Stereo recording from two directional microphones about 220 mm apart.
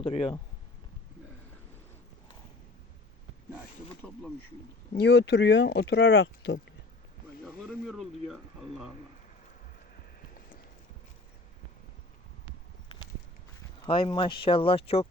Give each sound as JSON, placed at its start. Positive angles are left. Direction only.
{"t": 0.0, "sound": "speech", "side_deg": 25}
{"t": 4.0, "sound": "speech", "side_deg": 5}
{"t": 4.9, "sound": "speech", "side_deg": 50}
{"t": 7.4, "sound": "speech", "side_deg": 0}
{"t": 13.8, "sound": "speech", "side_deg": 20}